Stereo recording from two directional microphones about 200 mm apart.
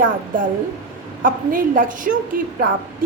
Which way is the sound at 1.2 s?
45° right (ahead or behind).